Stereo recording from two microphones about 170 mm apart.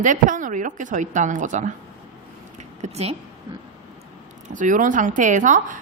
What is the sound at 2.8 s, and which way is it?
Speech, 35° right (ahead or behind).